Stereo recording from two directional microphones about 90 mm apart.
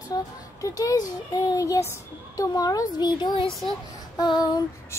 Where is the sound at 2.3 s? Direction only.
40° left (ahead or behind).